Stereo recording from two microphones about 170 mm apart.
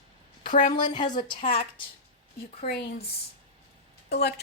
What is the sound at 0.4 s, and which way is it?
Speech, 50° left (ahead or behind).